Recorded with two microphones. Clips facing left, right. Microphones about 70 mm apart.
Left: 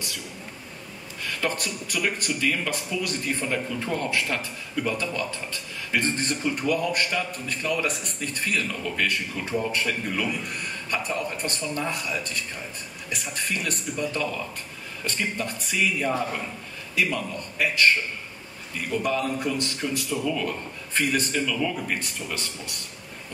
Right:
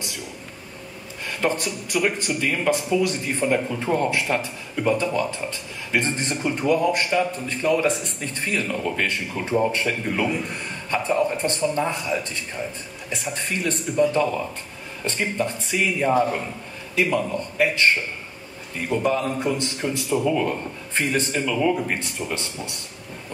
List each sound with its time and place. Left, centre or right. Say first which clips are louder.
1.2 s speech: right 4 dB; right
18.9 s speech: right 3 dB; right